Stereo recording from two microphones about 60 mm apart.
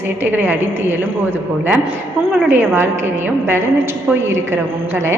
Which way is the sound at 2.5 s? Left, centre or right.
Right.